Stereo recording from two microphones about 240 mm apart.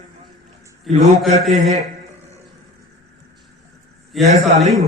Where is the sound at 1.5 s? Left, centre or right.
Right.